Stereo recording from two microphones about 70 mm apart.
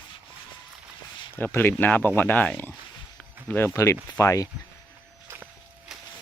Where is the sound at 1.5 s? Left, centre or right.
Left.